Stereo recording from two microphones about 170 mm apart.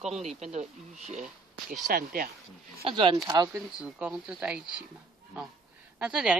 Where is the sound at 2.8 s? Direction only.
30° right (ahead or behind).